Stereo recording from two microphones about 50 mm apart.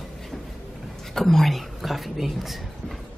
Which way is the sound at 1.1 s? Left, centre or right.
Centre.